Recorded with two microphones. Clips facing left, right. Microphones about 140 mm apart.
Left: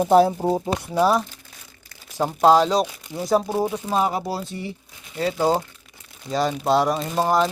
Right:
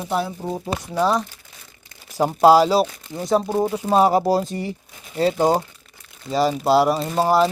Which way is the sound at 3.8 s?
35° right (ahead or behind).